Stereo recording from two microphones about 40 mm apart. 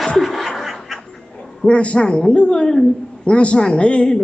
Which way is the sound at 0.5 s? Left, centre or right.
Centre.